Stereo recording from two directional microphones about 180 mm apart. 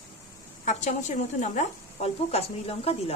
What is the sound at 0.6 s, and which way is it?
Speech, 40° left (ahead or behind).